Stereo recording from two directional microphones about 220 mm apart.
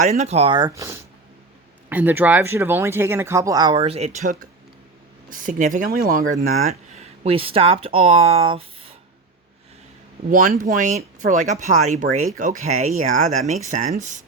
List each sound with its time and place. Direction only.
0.0 s speech: 35° right (ahead or behind)
10.2 s speech: 40° right (ahead or behind)